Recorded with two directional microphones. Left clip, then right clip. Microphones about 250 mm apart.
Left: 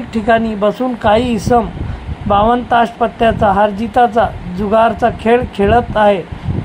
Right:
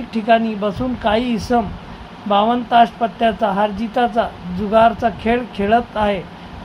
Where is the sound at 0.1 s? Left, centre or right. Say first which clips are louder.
Left 2 dB; centre.